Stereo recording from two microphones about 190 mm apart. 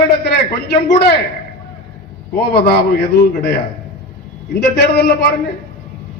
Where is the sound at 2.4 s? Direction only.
55° left (ahead or behind).